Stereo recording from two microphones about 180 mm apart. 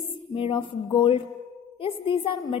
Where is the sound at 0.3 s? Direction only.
30° left (ahead or behind).